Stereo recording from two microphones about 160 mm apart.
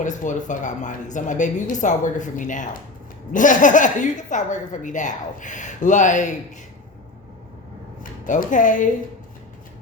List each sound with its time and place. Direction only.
0.0 s a woman's voice: 50° left (ahead or behind)
8.2 s a woman's voice: 55° left (ahead or behind)